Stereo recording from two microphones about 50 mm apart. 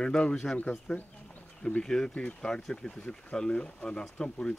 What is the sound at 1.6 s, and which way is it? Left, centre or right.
Speech, centre.